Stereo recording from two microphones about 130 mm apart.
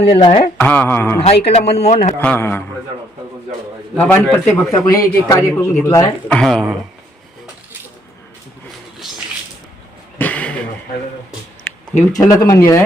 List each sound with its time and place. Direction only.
0.0 s speech: 45° left (ahead or behind)
0.5 s mantra: 15° left (ahead or behind)
1.2 s a man's voice: 55° left (ahead or behind)
2.1 s mantra: 15° left (ahead or behind)
3.9 s mantra: 15° left (ahead or behind)
4.9 s speech: 25° left (ahead or behind)
6.2 s speech: 5° left (ahead or behind)
10.2 s a sound: 10° left (ahead or behind)
12.1 s speech: 25° left (ahead or behind)